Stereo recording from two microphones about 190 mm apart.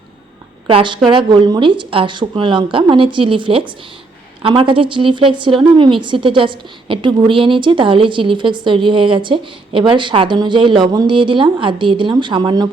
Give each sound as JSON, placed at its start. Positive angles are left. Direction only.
{"t": 0.7, "sound": "a woman's voice", "side_deg": -25}